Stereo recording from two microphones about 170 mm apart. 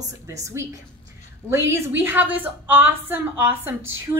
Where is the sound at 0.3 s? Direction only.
15° right (ahead or behind).